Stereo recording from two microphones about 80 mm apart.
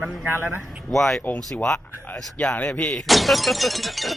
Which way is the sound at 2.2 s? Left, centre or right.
Centre.